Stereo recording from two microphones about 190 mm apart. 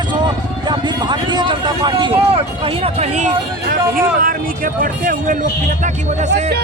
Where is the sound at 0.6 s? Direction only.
25° right (ahead or behind); by 5.3 s 45° right (ahead or behind).